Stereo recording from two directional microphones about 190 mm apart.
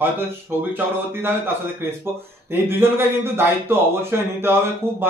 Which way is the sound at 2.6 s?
10° right (ahead or behind).